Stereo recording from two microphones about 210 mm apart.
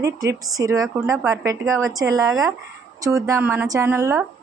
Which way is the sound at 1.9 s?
15° right (ahead or behind).